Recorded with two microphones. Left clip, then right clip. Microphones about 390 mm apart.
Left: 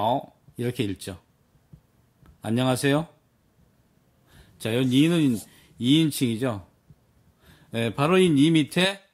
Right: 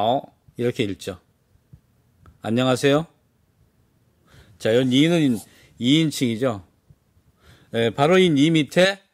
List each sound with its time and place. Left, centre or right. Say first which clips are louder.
0.0 s speech: right 3 dB; centre
2.4 s speech: right 5 dB; centre
4.4 s speech: right 7 dB; centre